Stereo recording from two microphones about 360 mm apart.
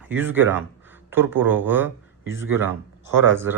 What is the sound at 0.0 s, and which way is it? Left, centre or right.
Speech, centre.